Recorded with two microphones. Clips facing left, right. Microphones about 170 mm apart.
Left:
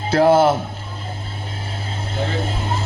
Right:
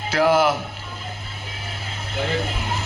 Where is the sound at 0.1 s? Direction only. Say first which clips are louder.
Left 4 dB; 30° left (ahead or behind).